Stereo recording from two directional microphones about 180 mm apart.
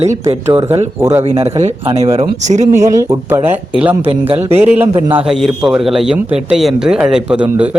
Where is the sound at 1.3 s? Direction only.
35° right (ahead or behind).